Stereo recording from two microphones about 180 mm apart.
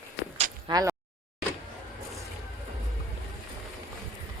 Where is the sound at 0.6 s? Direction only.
20° right (ahead or behind).